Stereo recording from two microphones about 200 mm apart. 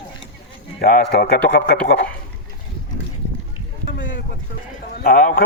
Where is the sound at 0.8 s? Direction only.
50° left (ahead or behind).